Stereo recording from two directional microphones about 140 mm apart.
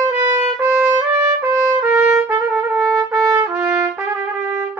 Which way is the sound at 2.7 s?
20° right (ahead or behind).